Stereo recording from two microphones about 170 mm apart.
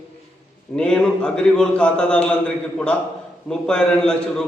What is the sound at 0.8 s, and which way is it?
A man's voice, 5° left (ahead or behind).